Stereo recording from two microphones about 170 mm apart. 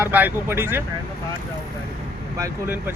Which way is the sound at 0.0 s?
10° right (ahead or behind).